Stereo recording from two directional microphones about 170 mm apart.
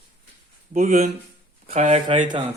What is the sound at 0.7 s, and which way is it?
Speech, 50° right (ahead or behind).